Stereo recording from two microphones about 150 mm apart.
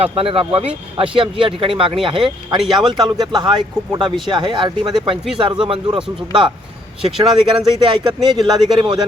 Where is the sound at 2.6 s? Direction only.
Centre (ahead or behind).